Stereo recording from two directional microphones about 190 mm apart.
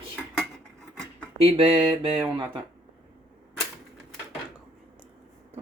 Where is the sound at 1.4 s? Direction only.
30° right (ahead or behind).